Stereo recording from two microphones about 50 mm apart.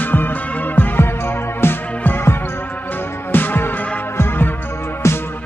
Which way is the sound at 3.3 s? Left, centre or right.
Left.